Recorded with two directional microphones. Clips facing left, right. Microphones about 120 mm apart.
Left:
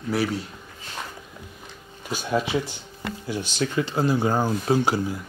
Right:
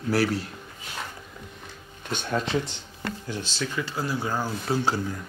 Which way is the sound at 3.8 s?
25° left (ahead or behind).